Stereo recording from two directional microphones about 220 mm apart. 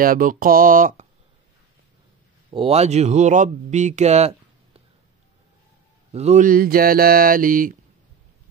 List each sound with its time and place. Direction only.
0.0 s speech: 40° right (ahead or behind)
2.5 s speech: 25° right (ahead or behind)
6.1 s speech: 30° right (ahead or behind)